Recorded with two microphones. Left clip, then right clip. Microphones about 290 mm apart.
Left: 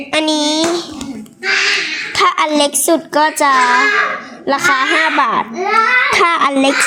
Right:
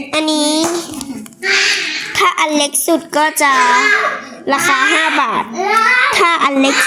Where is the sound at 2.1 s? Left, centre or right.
Centre.